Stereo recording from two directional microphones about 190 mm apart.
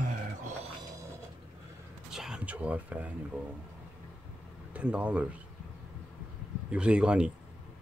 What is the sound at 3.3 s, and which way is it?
Speech, 10° right (ahead or behind).